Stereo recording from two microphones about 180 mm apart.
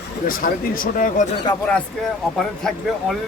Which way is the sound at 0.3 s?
50° left (ahead or behind).